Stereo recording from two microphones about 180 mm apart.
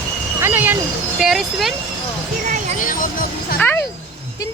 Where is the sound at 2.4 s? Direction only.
45° right (ahead or behind).